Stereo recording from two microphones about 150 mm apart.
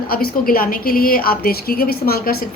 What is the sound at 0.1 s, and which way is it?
A woman's voice, 75° left (ahead or behind).